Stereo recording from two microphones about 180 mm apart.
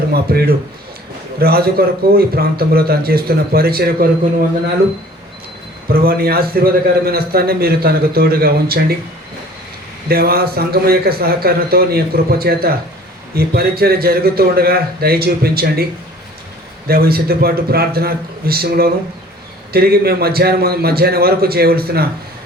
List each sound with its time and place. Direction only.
0.1 s a man's voice: 60° right (ahead or behind)
5.9 s a man's voice: 55° right (ahead or behind)
10.1 s a man's voice: 60° right (ahead or behind)
16.9 s a man's voice: 60° right (ahead or behind)